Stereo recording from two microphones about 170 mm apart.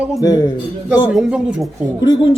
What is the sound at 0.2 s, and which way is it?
Speech, 20° left (ahead or behind).